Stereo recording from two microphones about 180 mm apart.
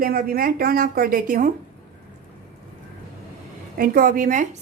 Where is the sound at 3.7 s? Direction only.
50° right (ahead or behind).